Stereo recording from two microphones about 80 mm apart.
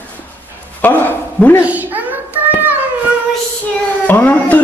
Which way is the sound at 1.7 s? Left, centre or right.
Right.